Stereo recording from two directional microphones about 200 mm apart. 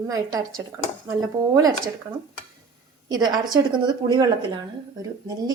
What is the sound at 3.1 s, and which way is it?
Speech, 20° right (ahead or behind).